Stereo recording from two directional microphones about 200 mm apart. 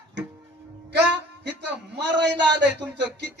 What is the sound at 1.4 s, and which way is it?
Speech, 60° right (ahead or behind).